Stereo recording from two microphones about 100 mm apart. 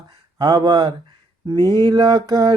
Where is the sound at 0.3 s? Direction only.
45° right (ahead or behind).